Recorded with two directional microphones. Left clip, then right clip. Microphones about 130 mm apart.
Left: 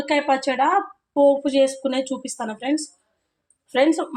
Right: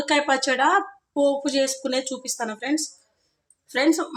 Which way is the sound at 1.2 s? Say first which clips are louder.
Left 5 dB; 15° left (ahead or behind).